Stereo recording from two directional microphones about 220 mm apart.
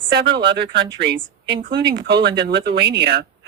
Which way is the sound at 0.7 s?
50° right (ahead or behind).